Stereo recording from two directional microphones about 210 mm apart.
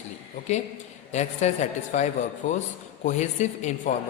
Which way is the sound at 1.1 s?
35° left (ahead or behind).